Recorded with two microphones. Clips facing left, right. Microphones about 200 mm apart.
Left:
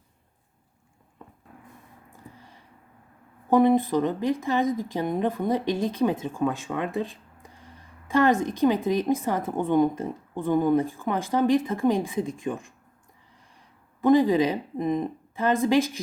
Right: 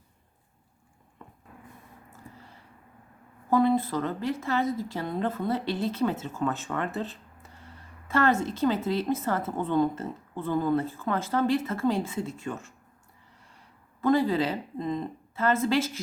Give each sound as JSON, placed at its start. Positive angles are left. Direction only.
{"t": 3.5, "sound": "a woman's voice", "side_deg": 15}
{"t": 14.0, "sound": "a woman's voice", "side_deg": 15}